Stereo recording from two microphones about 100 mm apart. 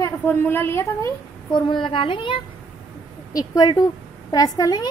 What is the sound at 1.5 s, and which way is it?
Speech, 55° left (ahead or behind).